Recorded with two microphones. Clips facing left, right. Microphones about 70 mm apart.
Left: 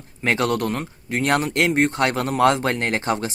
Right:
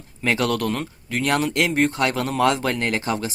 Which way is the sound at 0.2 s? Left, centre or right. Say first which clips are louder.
Left 1 dB; left.